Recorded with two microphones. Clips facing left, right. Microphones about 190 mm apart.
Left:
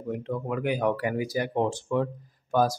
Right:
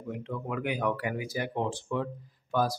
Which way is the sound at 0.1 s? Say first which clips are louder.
Left 5 dB; 40° left (ahead or behind).